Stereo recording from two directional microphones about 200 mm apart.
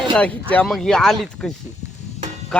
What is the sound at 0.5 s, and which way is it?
Speech, 5° left (ahead or behind).